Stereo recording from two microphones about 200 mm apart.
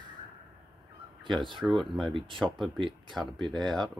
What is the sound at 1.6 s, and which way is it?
Speech, centre (ahead or behind).